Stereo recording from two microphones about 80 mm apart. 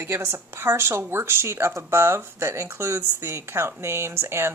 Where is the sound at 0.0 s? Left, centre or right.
Right.